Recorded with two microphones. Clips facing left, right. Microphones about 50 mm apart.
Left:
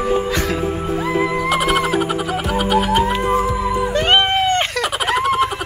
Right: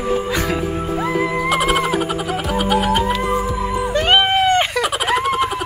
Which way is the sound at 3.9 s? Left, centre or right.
Centre.